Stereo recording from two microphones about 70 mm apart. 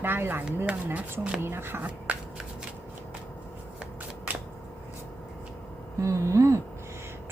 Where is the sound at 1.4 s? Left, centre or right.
Right.